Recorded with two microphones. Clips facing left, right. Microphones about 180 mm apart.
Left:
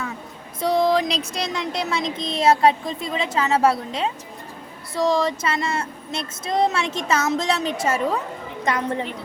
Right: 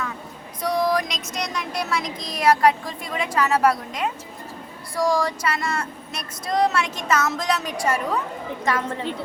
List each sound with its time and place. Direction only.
0.6 s speech: 25° left (ahead or behind)